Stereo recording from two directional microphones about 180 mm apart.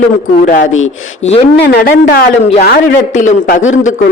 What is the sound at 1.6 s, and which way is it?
Speech, 60° left (ahead or behind).